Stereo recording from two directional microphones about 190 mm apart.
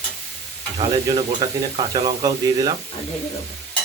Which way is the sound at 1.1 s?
30° right (ahead or behind).